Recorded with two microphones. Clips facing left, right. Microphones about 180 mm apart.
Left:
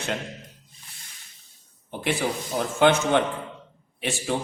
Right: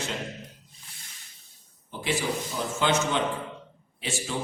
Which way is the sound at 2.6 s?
60° left (ahead or behind).